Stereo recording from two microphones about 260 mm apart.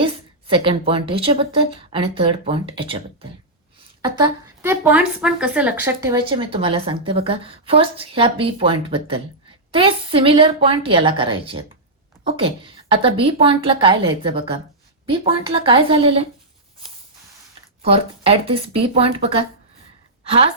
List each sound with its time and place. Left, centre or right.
0.0 s a woman's voice: right
6.2 s a woman's voice: centre
17.9 s a woman's voice: right